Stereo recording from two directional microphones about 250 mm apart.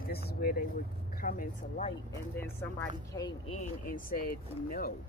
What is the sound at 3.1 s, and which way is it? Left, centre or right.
Speech, centre.